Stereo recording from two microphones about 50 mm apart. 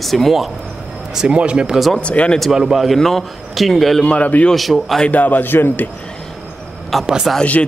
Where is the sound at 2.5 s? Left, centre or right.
Centre.